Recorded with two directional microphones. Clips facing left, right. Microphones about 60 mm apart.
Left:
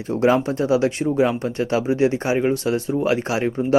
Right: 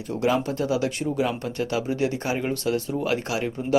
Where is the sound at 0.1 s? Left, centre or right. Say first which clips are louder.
Left 6 dB; left.